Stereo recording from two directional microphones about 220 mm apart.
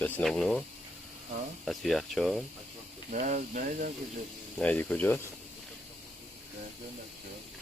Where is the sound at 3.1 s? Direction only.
35° right (ahead or behind).